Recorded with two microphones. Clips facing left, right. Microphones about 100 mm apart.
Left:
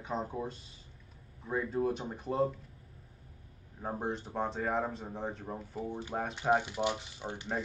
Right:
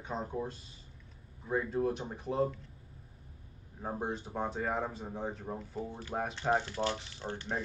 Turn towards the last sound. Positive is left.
turn(degrees=10)  # may be behind; listen again after turning